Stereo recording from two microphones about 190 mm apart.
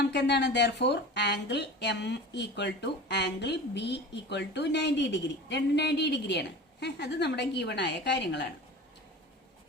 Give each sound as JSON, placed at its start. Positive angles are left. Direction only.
{"t": 0.0, "sound": "speech", "side_deg": 65}